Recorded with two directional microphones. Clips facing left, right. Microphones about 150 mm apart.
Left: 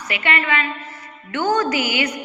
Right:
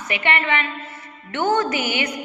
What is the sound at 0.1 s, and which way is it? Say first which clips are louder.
A woman's voice: even; 25° right (ahead or behind).